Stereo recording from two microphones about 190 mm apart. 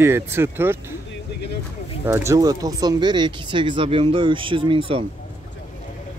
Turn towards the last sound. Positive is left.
turn(degrees=-30)  # may be behind; listen again after turning